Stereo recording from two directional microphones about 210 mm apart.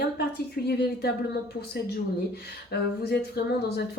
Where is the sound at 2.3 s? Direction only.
50° left (ahead or behind).